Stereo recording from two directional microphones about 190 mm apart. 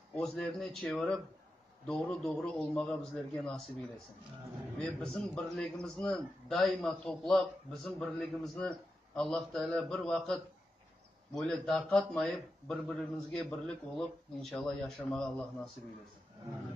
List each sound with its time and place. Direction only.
0.1 s a man's voice: 5° left (ahead or behind)
4.7 s a man's voice: 5° left (ahead or behind)